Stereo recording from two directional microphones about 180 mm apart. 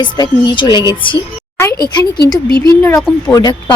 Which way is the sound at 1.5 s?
15° left (ahead or behind).